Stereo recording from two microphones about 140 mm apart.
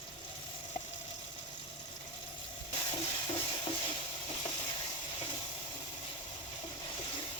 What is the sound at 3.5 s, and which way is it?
Stir, 35° left (ahead or behind).